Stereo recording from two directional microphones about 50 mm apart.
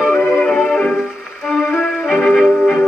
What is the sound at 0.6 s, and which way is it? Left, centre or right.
Music, centre.